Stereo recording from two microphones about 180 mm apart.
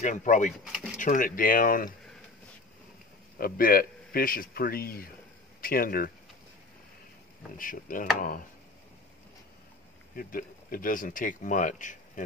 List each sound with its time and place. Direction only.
0.0 s speech: 45° left (ahead or behind)
3.3 s a man's voice: 55° left (ahead or behind)
7.5 s speech: 50° left (ahead or behind)
10.1 s speech: 50° left (ahead or behind)